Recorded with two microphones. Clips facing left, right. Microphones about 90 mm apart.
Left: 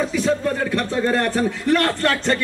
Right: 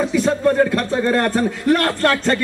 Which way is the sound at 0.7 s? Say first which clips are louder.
Right 2 dB; 45° right (ahead or behind).